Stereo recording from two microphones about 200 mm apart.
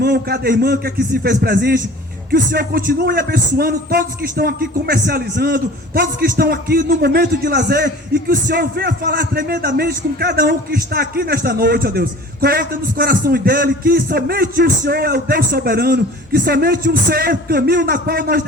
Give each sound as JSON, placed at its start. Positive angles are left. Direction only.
{"t": 0.0, "sound": "a man's voice", "side_deg": -50}